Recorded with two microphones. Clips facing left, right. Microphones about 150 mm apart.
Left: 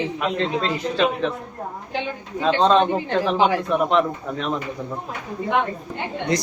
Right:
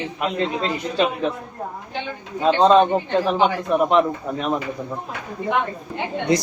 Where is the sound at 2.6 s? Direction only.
5° right (ahead or behind).